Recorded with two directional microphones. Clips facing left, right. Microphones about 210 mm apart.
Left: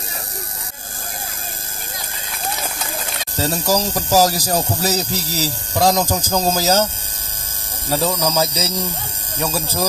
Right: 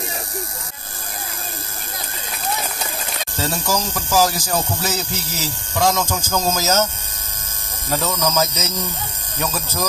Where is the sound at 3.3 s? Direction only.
35° left (ahead or behind).